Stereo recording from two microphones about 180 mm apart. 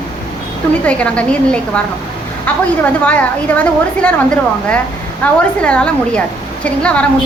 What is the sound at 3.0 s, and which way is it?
A woman's voice, 10° left (ahead or behind).